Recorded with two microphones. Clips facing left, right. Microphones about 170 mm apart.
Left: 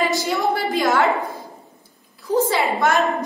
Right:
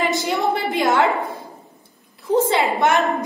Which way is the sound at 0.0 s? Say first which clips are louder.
Even; 20° right (ahead or behind).